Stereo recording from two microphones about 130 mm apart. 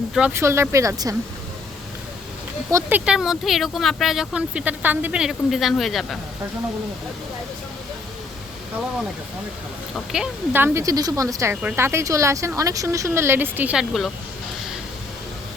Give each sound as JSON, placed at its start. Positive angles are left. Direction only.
{"t": 0.1, "sound": "speech", "side_deg": -5}
{"t": 0.3, "sound": "speech", "side_deg": -20}
{"t": 2.6, "sound": "speech", "side_deg": -25}
{"t": 3.1, "sound": "speech", "side_deg": -5}
{"t": 9.9, "sound": "speech", "side_deg": -5}
{"t": 10.5, "sound": "speech", "side_deg": -20}